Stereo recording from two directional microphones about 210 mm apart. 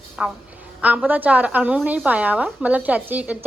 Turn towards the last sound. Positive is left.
turn(degrees=-5)  # may be behind; listen again after turning